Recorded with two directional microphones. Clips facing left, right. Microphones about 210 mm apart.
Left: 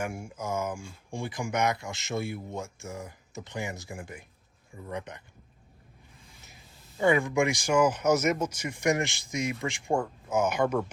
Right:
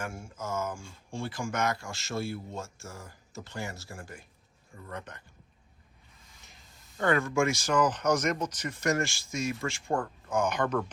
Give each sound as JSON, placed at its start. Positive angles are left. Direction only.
{"t": 0.0, "sound": "speech", "side_deg": 15}
{"t": 6.5, "sound": "speech", "side_deg": 10}